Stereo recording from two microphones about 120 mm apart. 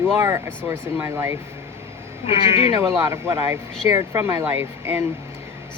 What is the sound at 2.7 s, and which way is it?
Speech, 25° right (ahead or behind).